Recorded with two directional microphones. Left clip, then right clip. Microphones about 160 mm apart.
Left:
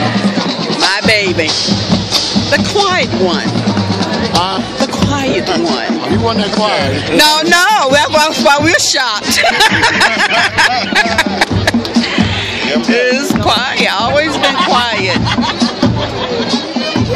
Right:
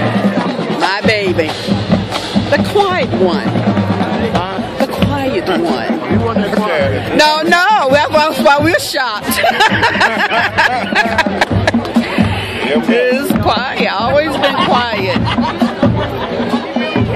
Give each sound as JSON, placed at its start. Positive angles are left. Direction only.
{"t": 0.8, "sound": "music", "side_deg": 0}
{"t": 2.5, "sound": "speech", "side_deg": 0}
{"t": 7.2, "sound": "a sound", "side_deg": 5}
{"t": 12.9, "sound": "music", "side_deg": 5}